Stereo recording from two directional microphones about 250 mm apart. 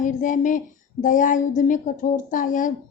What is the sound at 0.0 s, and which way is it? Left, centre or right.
Speech, left.